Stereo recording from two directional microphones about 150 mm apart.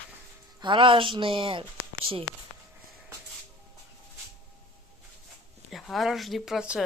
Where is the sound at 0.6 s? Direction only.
35° right (ahead or behind).